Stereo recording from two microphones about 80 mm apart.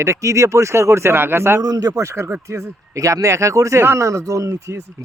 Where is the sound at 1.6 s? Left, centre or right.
Right.